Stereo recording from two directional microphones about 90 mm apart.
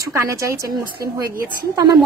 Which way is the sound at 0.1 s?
35° right (ahead or behind).